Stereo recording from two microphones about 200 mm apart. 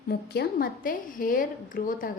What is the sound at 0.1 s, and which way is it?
A woman's voice, 50° left (ahead or behind).